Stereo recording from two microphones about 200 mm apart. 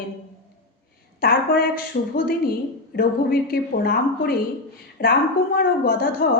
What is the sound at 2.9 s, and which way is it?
A woman's voice, 50° left (ahead or behind).